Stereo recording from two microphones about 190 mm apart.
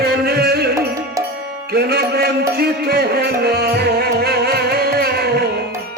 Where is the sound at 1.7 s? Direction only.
55° right (ahead or behind).